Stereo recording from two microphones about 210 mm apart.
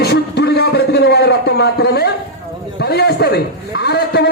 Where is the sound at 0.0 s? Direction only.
50° left (ahead or behind).